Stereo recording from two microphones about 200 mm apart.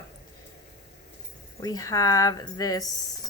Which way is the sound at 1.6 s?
15° left (ahead or behind).